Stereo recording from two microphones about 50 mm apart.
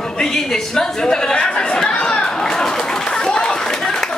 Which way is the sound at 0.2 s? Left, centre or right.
Centre.